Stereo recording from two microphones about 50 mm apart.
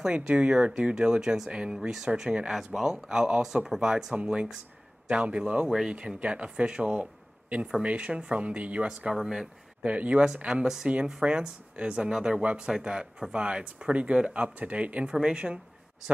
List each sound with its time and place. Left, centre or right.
0.0 s speech: right
5.7 s speech: centre
6.1 s speech: right
9.1 s speech: centre
9.8 s speech: right